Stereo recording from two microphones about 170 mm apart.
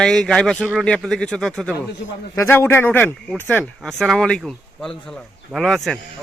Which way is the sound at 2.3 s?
15° left (ahead or behind).